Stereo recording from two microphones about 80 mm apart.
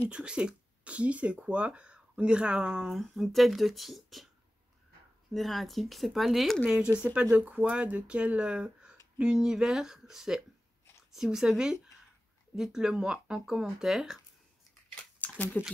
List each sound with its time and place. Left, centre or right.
0.1 s speech: centre
3.0 s speech: centre
5.3 s speech: centre
6.7 s speech: centre
15.1 s a sound: centre